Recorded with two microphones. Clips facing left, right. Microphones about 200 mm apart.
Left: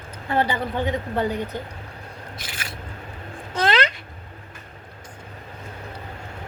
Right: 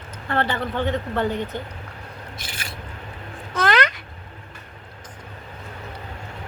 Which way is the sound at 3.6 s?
25° left (ahead or behind).